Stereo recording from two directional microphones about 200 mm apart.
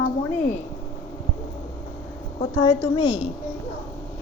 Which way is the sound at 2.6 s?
20° left (ahead or behind).